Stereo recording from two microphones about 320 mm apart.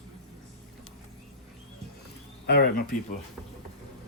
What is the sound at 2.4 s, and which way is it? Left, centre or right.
Speech, left.